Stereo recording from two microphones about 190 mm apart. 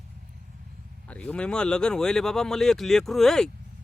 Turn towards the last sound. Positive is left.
turn(degrees=0)  # may be behind; listen again after turning